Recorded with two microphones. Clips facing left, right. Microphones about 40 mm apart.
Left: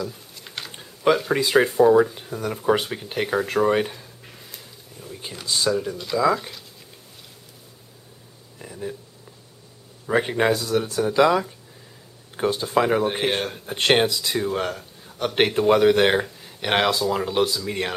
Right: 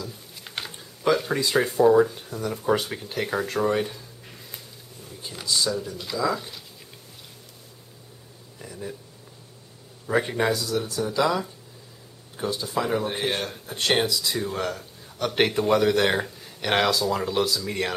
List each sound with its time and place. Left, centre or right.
0.4 s typing: centre
0.7 s typing: left
1.3 s speech: left
1.7 s speech: centre
2.1 s speech: left
5.5 s speech: left
6.1 s speech: centre
8.5 s a sound: centre
10.2 s speech: left
13.7 s speech: left
14.3 s speech: centre
16.2 s speech: centre